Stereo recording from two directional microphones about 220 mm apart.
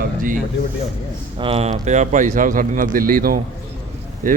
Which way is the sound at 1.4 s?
25° right (ahead or behind).